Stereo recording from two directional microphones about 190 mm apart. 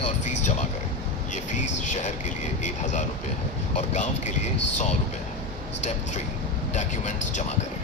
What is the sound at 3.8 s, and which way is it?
Speech, 40° left (ahead or behind).